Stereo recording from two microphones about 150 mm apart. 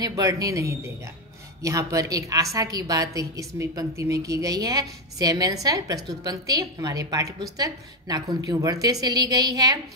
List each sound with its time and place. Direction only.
0.0 s a woman's voice: 25° right (ahead or behind)